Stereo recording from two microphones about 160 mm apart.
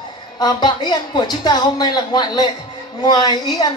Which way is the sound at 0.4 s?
25° left (ahead or behind).